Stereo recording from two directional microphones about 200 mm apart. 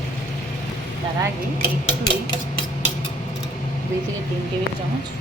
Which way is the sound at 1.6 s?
25° left (ahead or behind).